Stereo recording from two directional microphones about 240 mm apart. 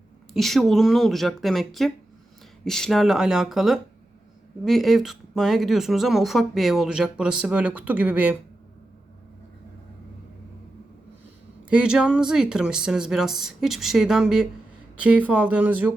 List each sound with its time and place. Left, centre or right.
0.3 s a woman's voice: centre
11.7 s a woman's voice: centre